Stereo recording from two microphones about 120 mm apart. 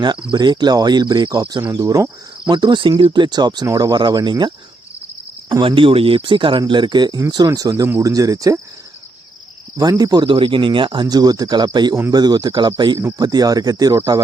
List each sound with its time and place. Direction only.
0.3 s speech: 40° right (ahead or behind)
2.5 s speech: 40° right (ahead or behind)
9.9 s speech: 30° right (ahead or behind)
10.2 s speech: 45° right (ahead or behind); by 14.2 s 25° right (ahead or behind)